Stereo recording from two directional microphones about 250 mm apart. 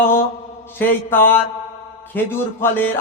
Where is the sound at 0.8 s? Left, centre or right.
Centre.